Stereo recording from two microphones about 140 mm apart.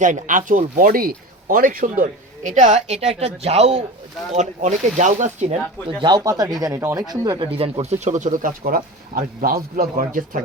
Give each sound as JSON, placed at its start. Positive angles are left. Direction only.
{"t": 0.0, "sound": "speech", "side_deg": -70}
{"t": 4.4, "sound": "speech", "side_deg": -60}
{"t": 6.0, "sound": "speech", "side_deg": -30}
{"t": 7.5, "sound": "speech", "side_deg": -45}